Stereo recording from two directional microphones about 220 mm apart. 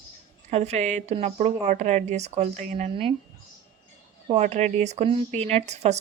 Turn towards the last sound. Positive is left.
turn(degrees=-30)  # may be behind; listen again after turning